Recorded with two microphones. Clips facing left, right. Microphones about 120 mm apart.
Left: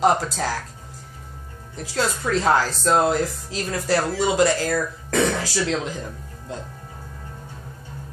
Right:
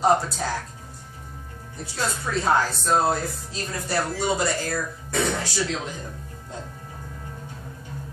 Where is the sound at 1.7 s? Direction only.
90° left.